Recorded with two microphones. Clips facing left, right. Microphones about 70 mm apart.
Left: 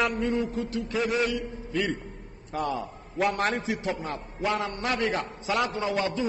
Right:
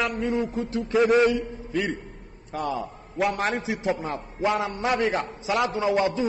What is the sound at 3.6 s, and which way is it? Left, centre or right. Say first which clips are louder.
A man's voice: right 3 dB; centre.